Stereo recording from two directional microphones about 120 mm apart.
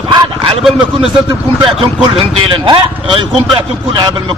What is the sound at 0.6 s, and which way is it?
Speech, 5° right (ahead or behind).